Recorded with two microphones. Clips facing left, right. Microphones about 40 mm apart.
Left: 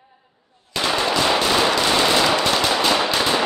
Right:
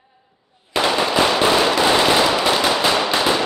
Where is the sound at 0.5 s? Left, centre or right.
Centre.